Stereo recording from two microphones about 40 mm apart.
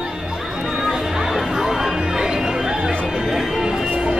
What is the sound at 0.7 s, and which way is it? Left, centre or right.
Music, centre.